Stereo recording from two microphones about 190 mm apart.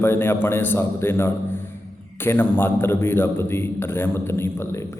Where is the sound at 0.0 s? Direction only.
10° left (ahead or behind).